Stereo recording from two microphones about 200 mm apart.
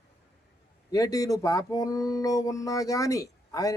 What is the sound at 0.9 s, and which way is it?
Speech, 15° left (ahead or behind).